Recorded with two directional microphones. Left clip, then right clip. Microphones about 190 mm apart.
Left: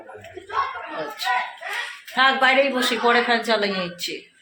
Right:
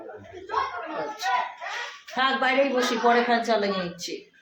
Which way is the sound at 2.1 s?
30° left (ahead or behind).